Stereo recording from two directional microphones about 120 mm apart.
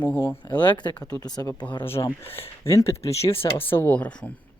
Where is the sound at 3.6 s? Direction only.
15° left (ahead or behind).